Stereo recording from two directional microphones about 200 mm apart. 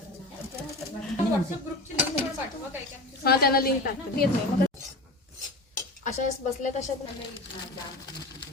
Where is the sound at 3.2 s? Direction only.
50° left (ahead or behind).